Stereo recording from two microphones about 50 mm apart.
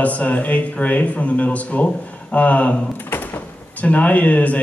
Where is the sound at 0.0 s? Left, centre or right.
Left.